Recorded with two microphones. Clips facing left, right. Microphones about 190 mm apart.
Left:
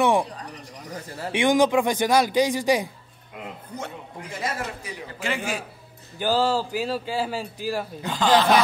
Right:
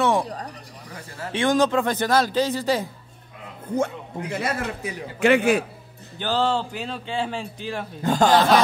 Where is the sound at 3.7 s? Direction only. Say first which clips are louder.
Right 14 dB; 60° right (ahead or behind).